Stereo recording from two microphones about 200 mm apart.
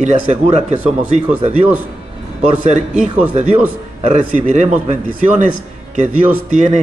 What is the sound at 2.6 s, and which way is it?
Speech, 35° right (ahead or behind).